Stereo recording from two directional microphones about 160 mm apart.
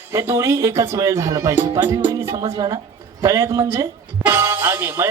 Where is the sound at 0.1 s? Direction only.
20° right (ahead or behind).